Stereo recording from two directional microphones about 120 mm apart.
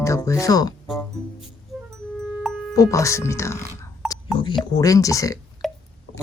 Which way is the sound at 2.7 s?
25° left (ahead or behind).